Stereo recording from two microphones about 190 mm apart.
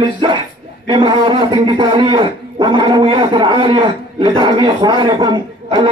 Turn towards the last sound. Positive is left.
turn(degrees=-25)  # may be behind; listen again after turning